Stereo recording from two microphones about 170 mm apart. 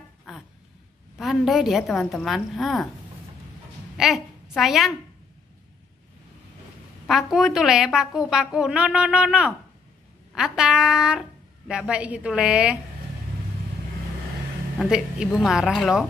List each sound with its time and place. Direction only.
0.3 s a sound: 5° right (ahead or behind)
1.1 s a woman's voice: centre (ahead or behind)
3.9 s a woman's voice: centre (ahead or behind)
7.1 s a woman's voice: centre (ahead or behind)
14.8 s a woman's voice: 5° right (ahead or behind)